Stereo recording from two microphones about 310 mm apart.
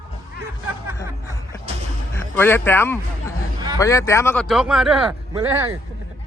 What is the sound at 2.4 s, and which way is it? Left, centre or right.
A man's voice, centre.